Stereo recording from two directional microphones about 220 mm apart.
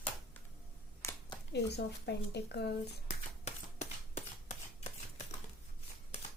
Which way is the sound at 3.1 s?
30° left (ahead or behind).